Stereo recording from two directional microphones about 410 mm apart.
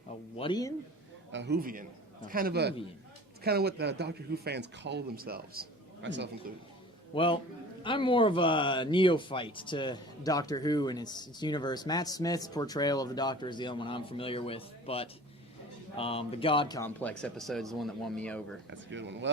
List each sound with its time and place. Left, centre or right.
0.3 s speech: centre
1.3 s speech: right
7.1 s a man's voice: centre
18.7 s speech: right